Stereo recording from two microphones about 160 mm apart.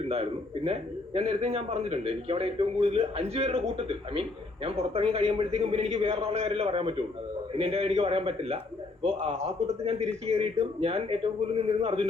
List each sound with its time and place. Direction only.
0.1 s a man's voice: 40° right (ahead or behind)